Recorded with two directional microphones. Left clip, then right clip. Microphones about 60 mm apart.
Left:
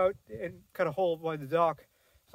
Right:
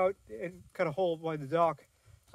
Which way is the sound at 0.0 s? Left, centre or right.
Left.